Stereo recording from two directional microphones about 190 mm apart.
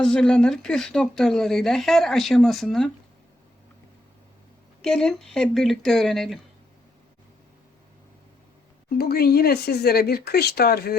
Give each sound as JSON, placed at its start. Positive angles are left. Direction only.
{"t": 0.0, "sound": "speech", "side_deg": 5}
{"t": 4.8, "sound": "speech", "side_deg": 5}
{"t": 9.0, "sound": "speech", "side_deg": 55}